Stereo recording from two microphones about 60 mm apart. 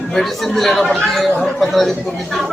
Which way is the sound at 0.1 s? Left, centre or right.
Centre.